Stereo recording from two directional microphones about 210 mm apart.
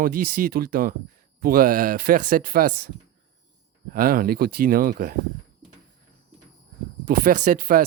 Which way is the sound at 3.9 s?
45° right (ahead or behind).